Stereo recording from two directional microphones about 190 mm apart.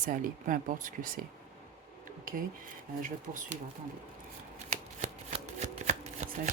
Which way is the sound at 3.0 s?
45° right (ahead or behind).